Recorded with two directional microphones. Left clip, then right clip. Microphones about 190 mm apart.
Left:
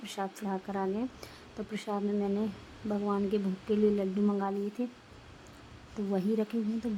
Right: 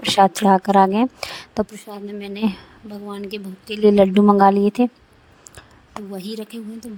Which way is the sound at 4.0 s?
55° right (ahead or behind).